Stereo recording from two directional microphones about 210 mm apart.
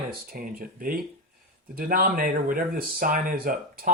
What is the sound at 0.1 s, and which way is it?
Speech, 45° right (ahead or behind).